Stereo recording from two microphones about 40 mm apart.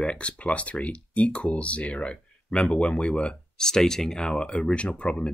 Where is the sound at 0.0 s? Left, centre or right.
Left.